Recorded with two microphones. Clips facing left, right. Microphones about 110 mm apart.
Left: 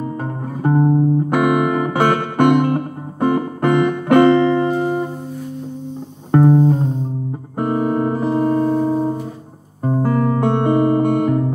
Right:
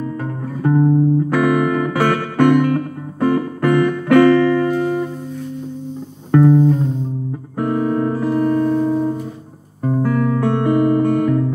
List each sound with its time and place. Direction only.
0.0 s music: 30° left (ahead or behind)
1.3 s music: 20° left (ahead or behind)
6.3 s music: 35° left (ahead or behind)